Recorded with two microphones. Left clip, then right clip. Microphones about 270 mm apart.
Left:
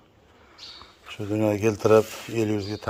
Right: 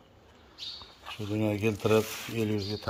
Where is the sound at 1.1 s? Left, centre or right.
Centre.